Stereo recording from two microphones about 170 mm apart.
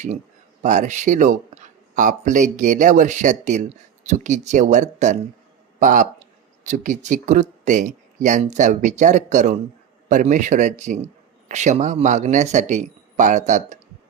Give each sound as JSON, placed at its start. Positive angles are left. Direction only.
{"t": 0.6, "sound": "speech", "side_deg": -45}